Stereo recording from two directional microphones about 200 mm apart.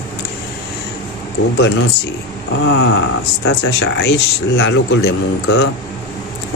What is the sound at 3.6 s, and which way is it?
A man's voice, 55° left (ahead or behind).